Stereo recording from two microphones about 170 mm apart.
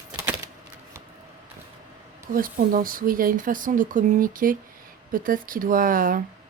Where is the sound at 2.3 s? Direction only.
55° right (ahead or behind).